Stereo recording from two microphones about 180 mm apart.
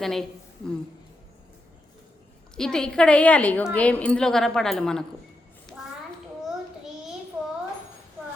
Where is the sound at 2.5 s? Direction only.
5° left (ahead or behind).